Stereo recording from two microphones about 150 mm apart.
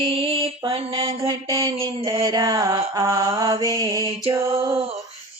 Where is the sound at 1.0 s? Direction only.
30° right (ahead or behind).